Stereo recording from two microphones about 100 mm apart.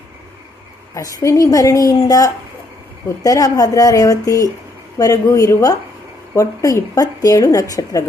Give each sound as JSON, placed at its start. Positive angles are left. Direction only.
{"t": 0.9, "sound": "a woman's voice", "side_deg": 35}